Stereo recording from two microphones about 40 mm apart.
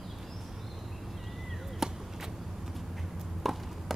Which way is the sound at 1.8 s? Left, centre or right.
Centre.